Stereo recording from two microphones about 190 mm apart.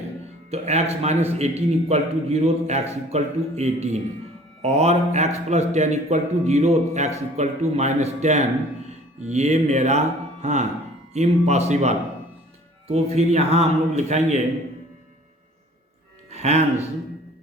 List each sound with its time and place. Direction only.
0.5 s a man's voice: 35° right (ahead or behind)
8.9 s music: 35° right (ahead or behind)
10.4 s a man's voice: 35° right (ahead or behind)
16.3 s speech: 35° right (ahead or behind)